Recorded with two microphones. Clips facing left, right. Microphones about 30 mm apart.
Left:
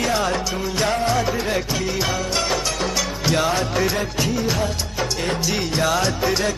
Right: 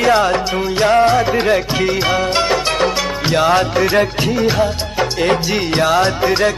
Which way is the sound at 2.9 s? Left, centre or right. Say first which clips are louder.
Right 5 dB; right.